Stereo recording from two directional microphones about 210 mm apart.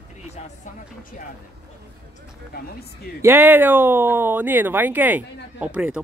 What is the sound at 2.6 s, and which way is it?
Speech, 50° left (ahead or behind).